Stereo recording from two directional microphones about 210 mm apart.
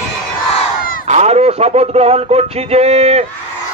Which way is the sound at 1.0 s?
30° right (ahead or behind).